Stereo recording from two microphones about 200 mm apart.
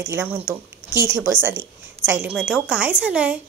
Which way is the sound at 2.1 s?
5° right (ahead or behind).